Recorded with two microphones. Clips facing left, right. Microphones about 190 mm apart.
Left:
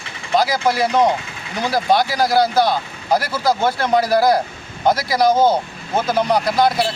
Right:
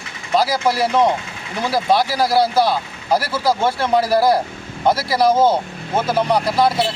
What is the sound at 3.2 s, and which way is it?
Speech, 30° right (ahead or behind).